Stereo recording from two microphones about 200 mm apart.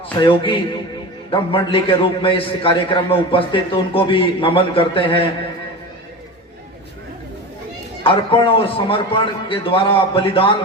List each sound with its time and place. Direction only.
0.2 s a man's voice: 25° left (ahead or behind)
8.0 s a man's voice: 25° left (ahead or behind)